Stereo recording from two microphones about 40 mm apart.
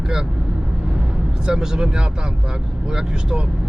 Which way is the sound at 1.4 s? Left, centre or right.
Centre.